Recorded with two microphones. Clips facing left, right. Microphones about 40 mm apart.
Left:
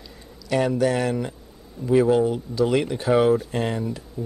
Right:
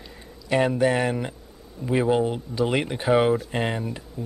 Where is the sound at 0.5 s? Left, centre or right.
Right.